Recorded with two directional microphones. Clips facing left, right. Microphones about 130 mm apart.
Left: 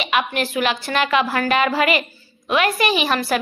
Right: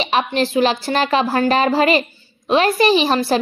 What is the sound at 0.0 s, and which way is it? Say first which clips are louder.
A woman's voice: right 3 dB; 30° right (ahead or behind).